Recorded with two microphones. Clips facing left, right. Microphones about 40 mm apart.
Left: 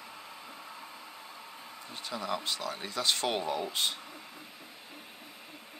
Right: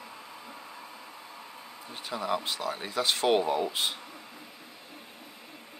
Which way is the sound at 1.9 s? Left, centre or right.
Centre.